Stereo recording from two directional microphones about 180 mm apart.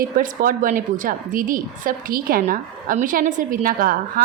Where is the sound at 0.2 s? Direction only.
50° right (ahead or behind).